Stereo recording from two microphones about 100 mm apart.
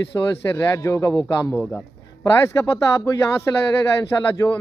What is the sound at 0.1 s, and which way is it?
Speech, 30° left (ahead or behind).